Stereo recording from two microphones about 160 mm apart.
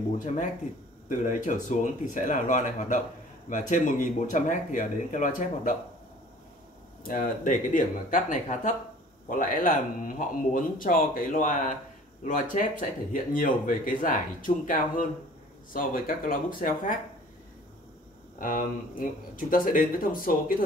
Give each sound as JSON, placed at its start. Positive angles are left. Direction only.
{"t": 0.2, "sound": "speech", "side_deg": 55}
{"t": 7.1, "sound": "speech", "side_deg": 60}
{"t": 18.4, "sound": "speech", "side_deg": 60}